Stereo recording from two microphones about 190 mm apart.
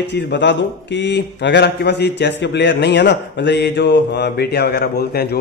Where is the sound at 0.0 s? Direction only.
65° left (ahead or behind).